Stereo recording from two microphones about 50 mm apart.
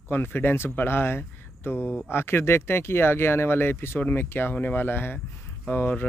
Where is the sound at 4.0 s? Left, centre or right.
Left.